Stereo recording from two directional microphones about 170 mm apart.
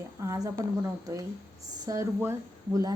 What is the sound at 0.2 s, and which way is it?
Speech, 20° right (ahead or behind).